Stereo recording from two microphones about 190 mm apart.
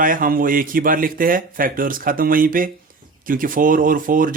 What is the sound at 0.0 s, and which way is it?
Speech, 45° right (ahead or behind).